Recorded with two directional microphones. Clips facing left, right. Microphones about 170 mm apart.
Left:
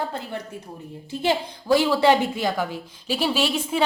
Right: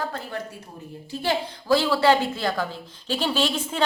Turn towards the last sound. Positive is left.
turn(degrees=10)  # may be behind; listen again after turning